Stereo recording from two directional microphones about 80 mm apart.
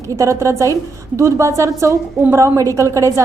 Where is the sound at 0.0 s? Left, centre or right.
Right.